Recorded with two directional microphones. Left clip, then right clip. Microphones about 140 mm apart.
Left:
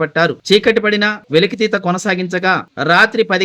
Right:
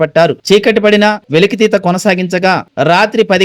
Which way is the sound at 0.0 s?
25° right (ahead or behind).